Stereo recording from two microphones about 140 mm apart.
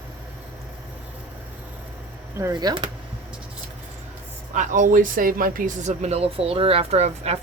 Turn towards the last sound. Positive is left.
turn(degrees=-50)  # may be behind; listen again after turning